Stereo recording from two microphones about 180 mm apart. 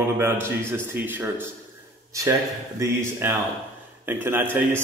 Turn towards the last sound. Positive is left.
turn(degrees=-10)  # may be behind; listen again after turning